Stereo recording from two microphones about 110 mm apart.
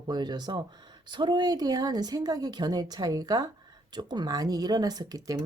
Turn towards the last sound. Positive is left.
turn(degrees=-35)  # may be behind; listen again after turning